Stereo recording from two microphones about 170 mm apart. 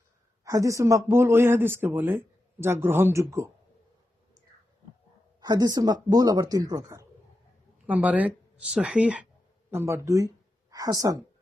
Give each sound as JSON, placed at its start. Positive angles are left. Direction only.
{"t": 0.4, "sound": "a man's voice", "side_deg": -20}
{"t": 5.4, "sound": "speech", "side_deg": -25}
{"t": 7.9, "sound": "a man's voice", "side_deg": -10}